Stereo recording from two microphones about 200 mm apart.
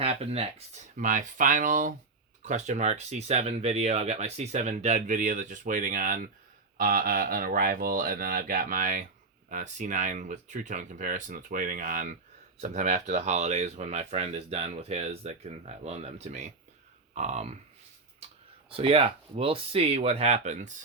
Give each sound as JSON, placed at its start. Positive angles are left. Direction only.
{"t": 0.0, "sound": "speech", "side_deg": -30}
{"t": 18.7, "sound": "speech", "side_deg": -25}